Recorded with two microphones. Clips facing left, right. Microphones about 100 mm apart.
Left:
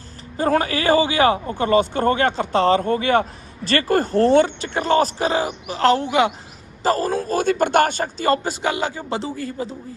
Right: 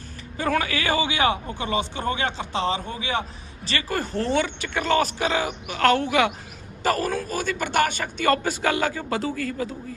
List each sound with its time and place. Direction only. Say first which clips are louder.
0.3 s a man's voice: left 5 dB; 35° left (ahead or behind)
7.3 s speech: left 8 dB; 50° left (ahead or behind); by 9.7 s 25° left (ahead or behind)